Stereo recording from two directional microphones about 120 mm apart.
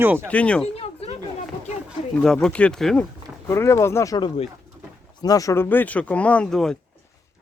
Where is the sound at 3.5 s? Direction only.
20° left (ahead or behind).